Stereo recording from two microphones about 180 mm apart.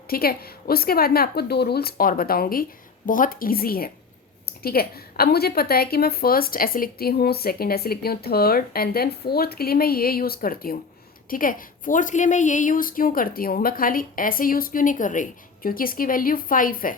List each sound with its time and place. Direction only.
0.1 s a woman's voice: 55° left (ahead or behind)